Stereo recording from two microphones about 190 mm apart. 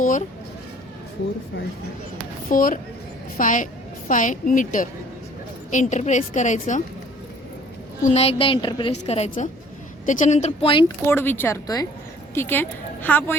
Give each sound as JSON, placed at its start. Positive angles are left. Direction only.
{"t": 0.0, "sound": "a sound", "side_deg": 45}
{"t": 2.5, "sound": "a woman's voice", "side_deg": 45}
{"t": 8.0, "sound": "a woman's voice", "side_deg": 35}
{"t": 11.0, "sound": "a woman's voice", "side_deg": 10}